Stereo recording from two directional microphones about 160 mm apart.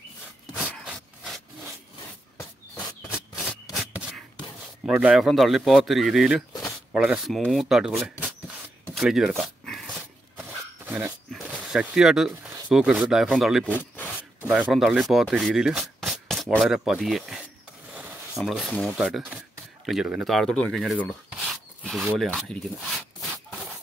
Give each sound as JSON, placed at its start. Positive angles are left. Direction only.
{"t": 0.9, "sound": "wood", "side_deg": 0}
{"t": 2.3, "sound": "a sound", "side_deg": 20}
{"t": 4.8, "sound": "speech", "side_deg": -5}
{"t": 9.4, "sound": "dog", "side_deg": 0}
{"t": 10.9, "sound": "speech", "side_deg": -10}
{"t": 13.7, "sound": "rub", "side_deg": 10}
{"t": 14.5, "sound": "speech", "side_deg": -5}
{"t": 17.9, "sound": "a sound", "side_deg": 0}
{"t": 18.9, "sound": "speech", "side_deg": -5}